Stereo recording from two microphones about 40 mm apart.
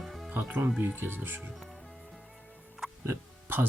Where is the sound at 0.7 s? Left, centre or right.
Right.